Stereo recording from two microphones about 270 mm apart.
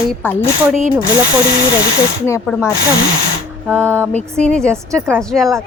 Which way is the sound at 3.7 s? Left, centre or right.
Centre.